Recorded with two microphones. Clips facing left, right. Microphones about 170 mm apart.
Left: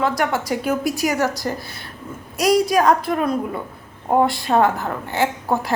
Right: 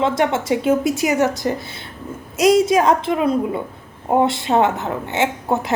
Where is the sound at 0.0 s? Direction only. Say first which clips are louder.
Right 2 dB; 25° right (ahead or behind).